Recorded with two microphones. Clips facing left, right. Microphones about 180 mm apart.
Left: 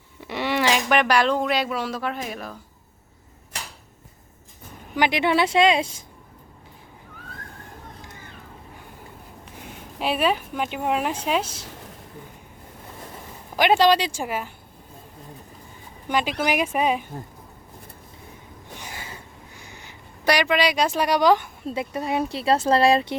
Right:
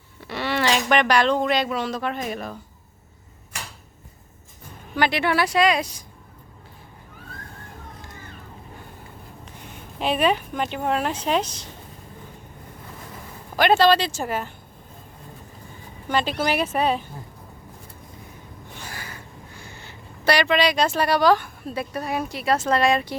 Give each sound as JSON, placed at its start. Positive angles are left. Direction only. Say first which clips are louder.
{"t": 0.3, "sound": "a sound", "louder": "left 1 dB", "side_deg": 15}
{"t": 0.6, "sound": "speech", "louder": "right 1 dB", "side_deg": 5}
{"t": 4.9, "sound": "speech", "louder": "left 1 dB", "side_deg": 15}
{"t": 10.0, "sound": "speech", "louder": "right 1 dB", "side_deg": 5}
{"t": 13.6, "sound": "speech", "louder": "right 1 dB", "side_deg": 15}
{"t": 16.0, "sound": "speech", "louder": "even", "side_deg": 10}
{"t": 18.8, "sound": "speech", "louder": "right 1 dB", "side_deg": 20}